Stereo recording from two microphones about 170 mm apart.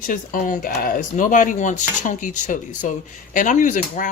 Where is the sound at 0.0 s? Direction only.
55° left (ahead or behind).